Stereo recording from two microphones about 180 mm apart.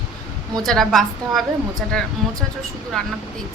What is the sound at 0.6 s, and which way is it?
Speech, centre (ahead or behind).